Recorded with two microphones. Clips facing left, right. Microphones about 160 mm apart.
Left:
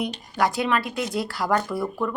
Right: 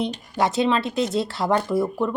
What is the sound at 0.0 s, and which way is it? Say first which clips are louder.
Speech: right 1 dB; 25° right (ahead or behind).